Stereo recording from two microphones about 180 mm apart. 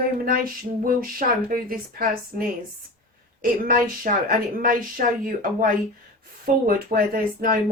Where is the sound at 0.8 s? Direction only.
55° right (ahead or behind).